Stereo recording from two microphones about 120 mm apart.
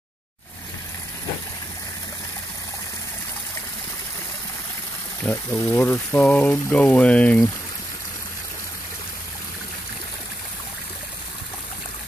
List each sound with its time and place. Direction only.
5.2 s speech: 20° left (ahead or behind)